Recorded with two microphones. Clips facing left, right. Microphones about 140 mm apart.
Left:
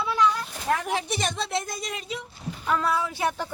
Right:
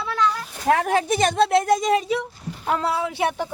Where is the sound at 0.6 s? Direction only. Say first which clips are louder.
Right 7 dB; 75° right (ahead or behind).